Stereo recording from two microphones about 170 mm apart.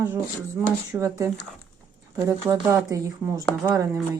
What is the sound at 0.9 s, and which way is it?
Speech, 15° right (ahead or behind).